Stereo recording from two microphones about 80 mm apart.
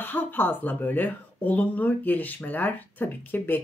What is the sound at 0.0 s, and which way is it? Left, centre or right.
Speech, left.